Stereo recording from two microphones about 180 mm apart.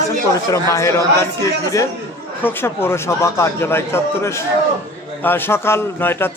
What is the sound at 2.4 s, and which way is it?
A man's voice, 15° left (ahead or behind).